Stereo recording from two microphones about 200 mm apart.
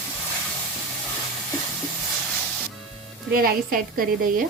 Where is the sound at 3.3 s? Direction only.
45° right (ahead or behind).